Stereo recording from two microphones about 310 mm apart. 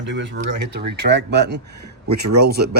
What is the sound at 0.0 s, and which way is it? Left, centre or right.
Speech, right.